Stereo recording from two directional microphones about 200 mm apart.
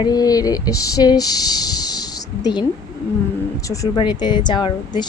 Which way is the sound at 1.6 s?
20° left (ahead or behind).